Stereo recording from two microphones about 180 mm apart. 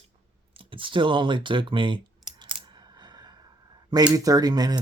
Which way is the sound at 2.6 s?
25° right (ahead or behind).